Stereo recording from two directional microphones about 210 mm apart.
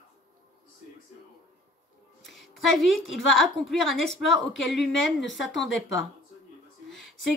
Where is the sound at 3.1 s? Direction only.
Centre (ahead or behind).